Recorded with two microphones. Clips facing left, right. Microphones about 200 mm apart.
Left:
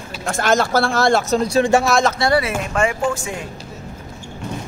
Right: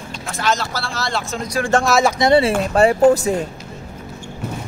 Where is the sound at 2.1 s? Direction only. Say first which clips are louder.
Right 4 dB; 20° right (ahead or behind); by 3.5 s 40° right (ahead or behind).